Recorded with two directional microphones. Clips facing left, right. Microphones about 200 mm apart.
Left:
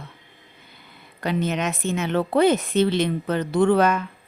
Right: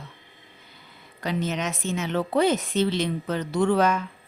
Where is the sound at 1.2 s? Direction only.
60° left (ahead or behind).